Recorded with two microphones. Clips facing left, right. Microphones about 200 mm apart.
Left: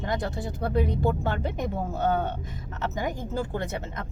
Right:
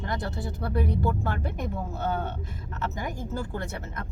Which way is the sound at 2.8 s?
20° left (ahead or behind).